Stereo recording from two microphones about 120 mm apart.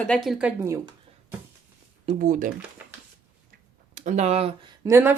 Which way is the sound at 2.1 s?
90° right.